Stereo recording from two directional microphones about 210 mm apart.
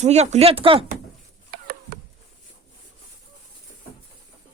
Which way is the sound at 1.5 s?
45° right (ahead or behind).